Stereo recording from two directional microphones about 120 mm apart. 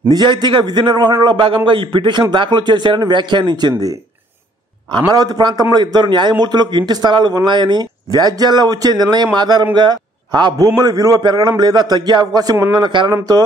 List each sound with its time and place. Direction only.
0.1 s a man's voice: 40° right (ahead or behind)